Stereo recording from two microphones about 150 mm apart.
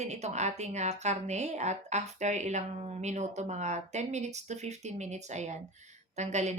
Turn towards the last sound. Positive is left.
turn(degrees=-50)  # may be behind; listen again after turning